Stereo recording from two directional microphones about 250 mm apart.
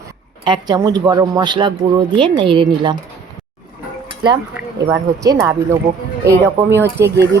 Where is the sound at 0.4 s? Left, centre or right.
Centre.